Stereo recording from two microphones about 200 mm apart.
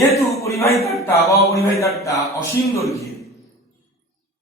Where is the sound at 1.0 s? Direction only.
15° left (ahead or behind).